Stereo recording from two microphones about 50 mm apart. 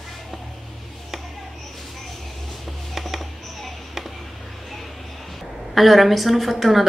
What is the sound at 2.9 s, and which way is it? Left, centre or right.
Music, centre.